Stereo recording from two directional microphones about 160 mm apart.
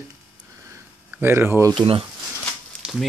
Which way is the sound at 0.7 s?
15° right (ahead or behind).